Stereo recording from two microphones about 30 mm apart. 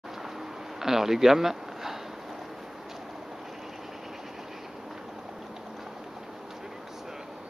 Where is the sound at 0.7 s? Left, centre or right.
Centre.